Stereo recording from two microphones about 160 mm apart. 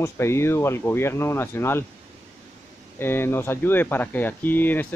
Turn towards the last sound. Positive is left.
turn(degrees=10)  # may be behind; listen again after turning